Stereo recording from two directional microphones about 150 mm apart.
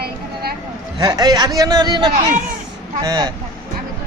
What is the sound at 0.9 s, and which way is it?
A man's voice, 25° right (ahead or behind).